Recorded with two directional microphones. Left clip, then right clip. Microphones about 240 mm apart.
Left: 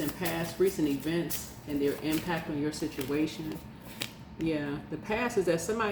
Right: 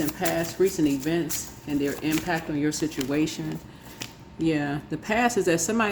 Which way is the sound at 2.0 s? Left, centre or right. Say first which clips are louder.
Right 5 dB; right.